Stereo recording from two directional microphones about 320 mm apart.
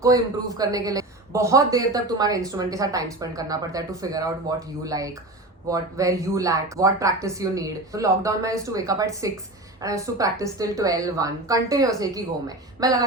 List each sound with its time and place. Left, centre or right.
0.0 s a man's voice: centre